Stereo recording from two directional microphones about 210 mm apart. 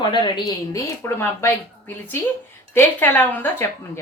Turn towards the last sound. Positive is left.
turn(degrees=10)  # may be behind; listen again after turning